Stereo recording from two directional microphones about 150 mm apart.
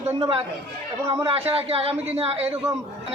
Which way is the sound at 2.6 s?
20° right (ahead or behind).